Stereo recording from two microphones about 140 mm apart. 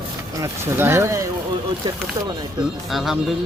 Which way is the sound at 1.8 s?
35° right (ahead or behind).